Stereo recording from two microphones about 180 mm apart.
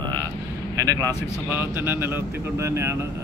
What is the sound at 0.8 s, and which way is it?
Speech, 20° right (ahead or behind).